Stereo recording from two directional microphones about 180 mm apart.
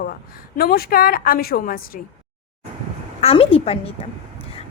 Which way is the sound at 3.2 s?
35° left (ahead or behind).